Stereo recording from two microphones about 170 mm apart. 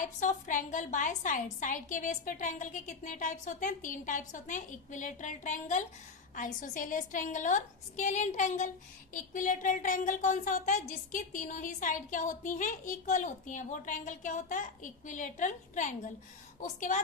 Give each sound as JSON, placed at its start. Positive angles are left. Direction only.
{"t": 0.0, "sound": "speech", "side_deg": 50}